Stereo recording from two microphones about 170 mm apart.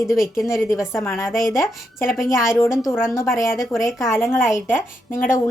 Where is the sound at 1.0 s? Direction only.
15° left (ahead or behind).